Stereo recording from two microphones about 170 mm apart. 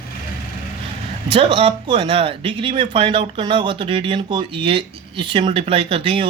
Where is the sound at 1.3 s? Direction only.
35° right (ahead or behind).